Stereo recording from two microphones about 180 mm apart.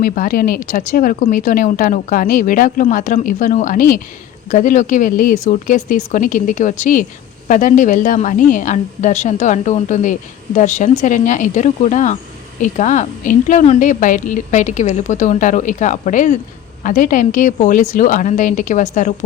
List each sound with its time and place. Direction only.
0.0 s a woman's voice: 50° left (ahead or behind)